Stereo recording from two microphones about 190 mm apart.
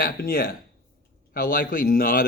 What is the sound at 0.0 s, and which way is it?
Speech, 55° left (ahead or behind).